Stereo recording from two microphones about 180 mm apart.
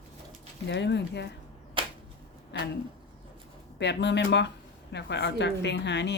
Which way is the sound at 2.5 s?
70° left (ahead or behind).